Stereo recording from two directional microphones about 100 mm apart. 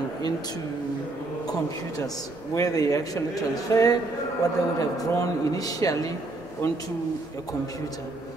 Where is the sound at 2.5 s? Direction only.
35° left (ahead or behind).